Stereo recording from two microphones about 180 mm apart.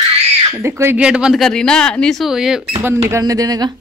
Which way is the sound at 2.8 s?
15° right (ahead or behind).